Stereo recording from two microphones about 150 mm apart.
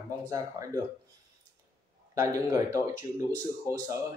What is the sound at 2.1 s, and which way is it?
Speech, 20° right (ahead or behind).